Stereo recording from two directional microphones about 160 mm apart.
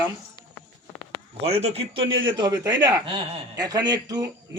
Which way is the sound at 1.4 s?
40° right (ahead or behind).